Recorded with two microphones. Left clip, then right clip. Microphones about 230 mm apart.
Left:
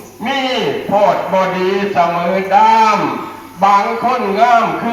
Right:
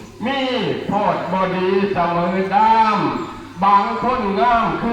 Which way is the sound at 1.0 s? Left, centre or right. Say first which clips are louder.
Left 7 dB; left.